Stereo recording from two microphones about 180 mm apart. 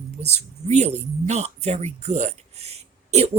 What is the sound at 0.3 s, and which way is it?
Speech, 35° right (ahead or behind).